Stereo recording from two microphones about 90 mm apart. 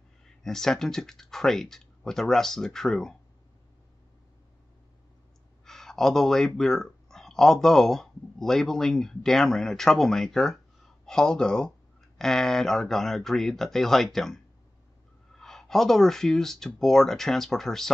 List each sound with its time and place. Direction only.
0.4 s speech: 5° left (ahead or behind)
5.7 s speech: 5° left (ahead or behind)